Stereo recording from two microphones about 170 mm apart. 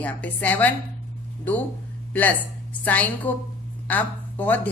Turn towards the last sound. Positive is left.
turn(degrees=10)  # may be behind; listen again after turning